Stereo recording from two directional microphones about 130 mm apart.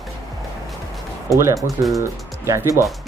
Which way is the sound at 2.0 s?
20° right (ahead or behind).